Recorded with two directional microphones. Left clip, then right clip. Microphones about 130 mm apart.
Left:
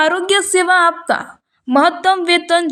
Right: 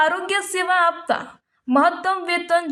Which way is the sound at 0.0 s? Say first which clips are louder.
Left 5 dB; 25° left (ahead or behind).